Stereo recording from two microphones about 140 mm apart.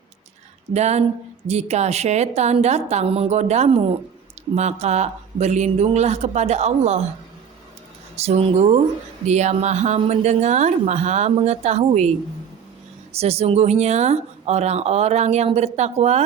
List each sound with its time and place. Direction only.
0.7 s speech: 50° right (ahead or behind)
8.1 s speech: 50° right (ahead or behind)
13.1 s speech: 45° right (ahead or behind)